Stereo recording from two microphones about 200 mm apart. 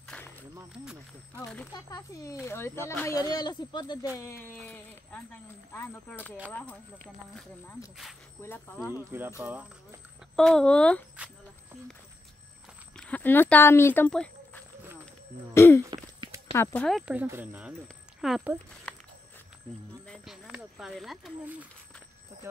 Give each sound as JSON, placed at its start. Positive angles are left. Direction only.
{"t": 0.1, "sound": "a sound", "side_deg": 10}
{"t": 0.6, "sound": "speech", "side_deg": -10}
{"t": 1.4, "sound": "speech", "side_deg": 5}
{"t": 1.7, "sound": "speech", "side_deg": 20}
{"t": 8.4, "sound": "speech", "side_deg": 10}
{"t": 9.4, "sound": "speech", "side_deg": -10}
{"t": 12.9, "sound": "speech", "side_deg": 5}
{"t": 15.9, "sound": "a sound", "side_deg": -20}
{"t": 16.5, "sound": "speech", "side_deg": 5}
{"t": 20.1, "sound": "speech", "side_deg": 0}